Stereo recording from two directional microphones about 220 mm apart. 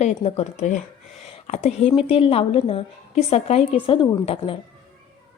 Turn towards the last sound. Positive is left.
turn(degrees=25)  # may be behind; listen again after turning